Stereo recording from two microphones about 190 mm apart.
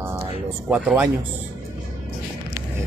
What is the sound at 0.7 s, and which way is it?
Speech, 5° right (ahead or behind).